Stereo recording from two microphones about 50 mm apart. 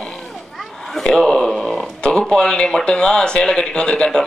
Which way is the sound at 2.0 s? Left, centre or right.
Centre.